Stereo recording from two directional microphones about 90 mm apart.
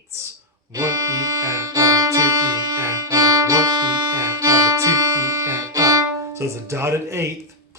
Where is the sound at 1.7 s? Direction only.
40° right (ahead or behind).